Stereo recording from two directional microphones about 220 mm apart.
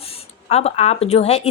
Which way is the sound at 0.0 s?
25° left (ahead or behind).